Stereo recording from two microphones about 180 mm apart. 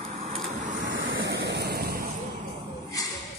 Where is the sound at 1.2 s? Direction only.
70° right (ahead or behind).